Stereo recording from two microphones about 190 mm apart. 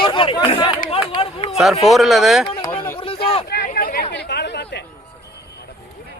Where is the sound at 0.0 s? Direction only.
25° left (ahead or behind).